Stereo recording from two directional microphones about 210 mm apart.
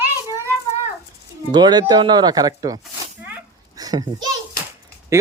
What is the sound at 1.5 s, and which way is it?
Speech, 20° right (ahead or behind).